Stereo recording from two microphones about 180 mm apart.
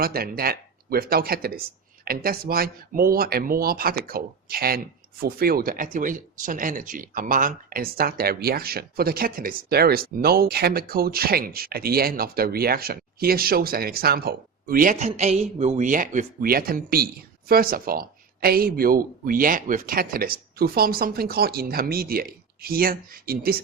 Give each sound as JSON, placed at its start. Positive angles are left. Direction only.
{"t": 0.0, "sound": "speech", "side_deg": -55}